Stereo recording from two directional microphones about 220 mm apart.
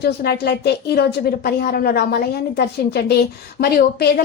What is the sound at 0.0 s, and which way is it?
A woman's voice, 45° left (ahead or behind).